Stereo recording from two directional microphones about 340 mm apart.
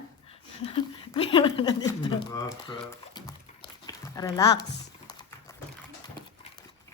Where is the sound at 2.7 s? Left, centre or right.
Centre.